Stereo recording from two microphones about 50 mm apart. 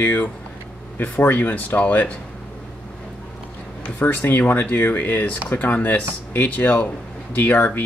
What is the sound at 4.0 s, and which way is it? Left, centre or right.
Speech, left.